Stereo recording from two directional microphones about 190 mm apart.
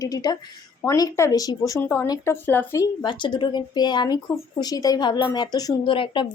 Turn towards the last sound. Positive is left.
turn(degrees=25)  # may be behind; listen again after turning